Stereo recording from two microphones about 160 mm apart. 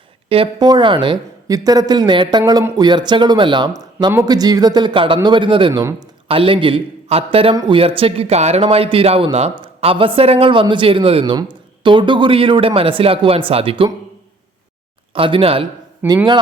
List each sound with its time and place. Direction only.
0.3 s speech: 30° right (ahead or behind)
15.1 s speech: 35° right (ahead or behind)